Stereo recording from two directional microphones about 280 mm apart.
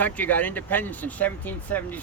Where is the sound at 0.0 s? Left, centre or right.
Centre.